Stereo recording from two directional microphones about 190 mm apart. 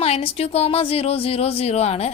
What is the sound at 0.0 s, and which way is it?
Speech, 30° left (ahead or behind).